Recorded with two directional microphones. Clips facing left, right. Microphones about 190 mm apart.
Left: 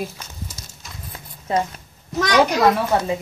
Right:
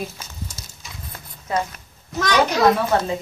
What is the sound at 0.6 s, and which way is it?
Clip-clop, centre (ahead or behind).